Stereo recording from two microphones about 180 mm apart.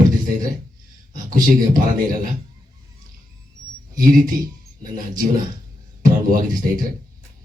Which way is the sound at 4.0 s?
50° right (ahead or behind).